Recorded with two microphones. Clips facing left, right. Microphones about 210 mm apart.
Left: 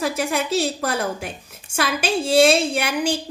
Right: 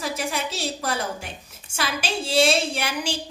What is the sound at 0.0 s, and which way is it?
A woman's voice, 55° left (ahead or behind).